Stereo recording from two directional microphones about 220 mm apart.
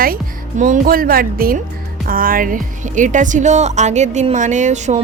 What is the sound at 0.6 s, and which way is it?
Speech, 40° right (ahead or behind).